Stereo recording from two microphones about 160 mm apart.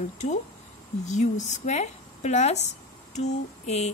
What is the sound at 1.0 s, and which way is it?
Speech, 50° left (ahead or behind).